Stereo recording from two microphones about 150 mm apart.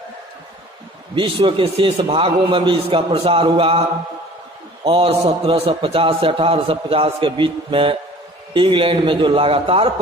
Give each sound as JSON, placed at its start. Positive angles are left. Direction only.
{"t": 1.1, "sound": "a man's voice", "side_deg": -35}
{"t": 4.8, "sound": "a man's voice", "side_deg": -35}